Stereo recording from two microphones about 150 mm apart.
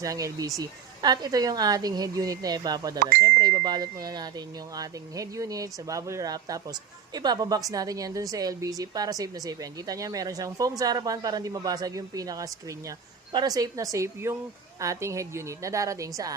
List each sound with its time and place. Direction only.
0.0 s speech: 20° right (ahead or behind)